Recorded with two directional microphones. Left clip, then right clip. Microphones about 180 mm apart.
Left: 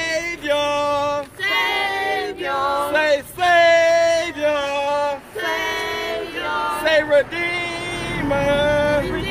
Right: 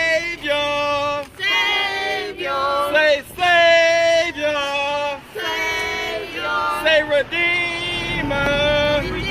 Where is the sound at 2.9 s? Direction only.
20° left (ahead or behind).